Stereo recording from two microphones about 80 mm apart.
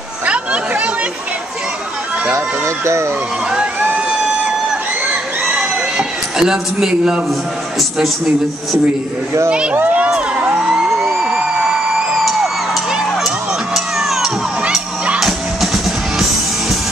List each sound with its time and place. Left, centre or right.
0.3 s chatter: centre
2.2 s speech: right
5.6 s a sound: centre
9.5 s speech: centre
9.8 s a sound: centre
10.1 s music: centre
11.1 s a sound: centre
13.7 s crowd: centre
14.7 s music: centre